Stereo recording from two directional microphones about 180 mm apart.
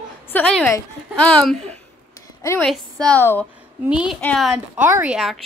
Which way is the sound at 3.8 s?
5° right (ahead or behind).